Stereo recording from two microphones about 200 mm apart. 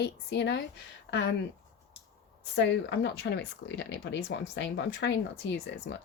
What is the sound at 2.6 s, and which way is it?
A woman's voice, 60° left (ahead or behind).